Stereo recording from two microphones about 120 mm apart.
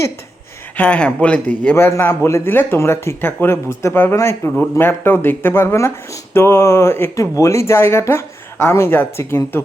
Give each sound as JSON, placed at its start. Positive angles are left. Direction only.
{"t": 0.8, "sound": "a man's voice", "side_deg": 10}